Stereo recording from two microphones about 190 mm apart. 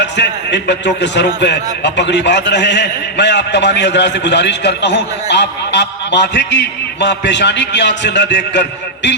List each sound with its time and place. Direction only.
0.0 s a man's voice: 65° left (ahead or behind)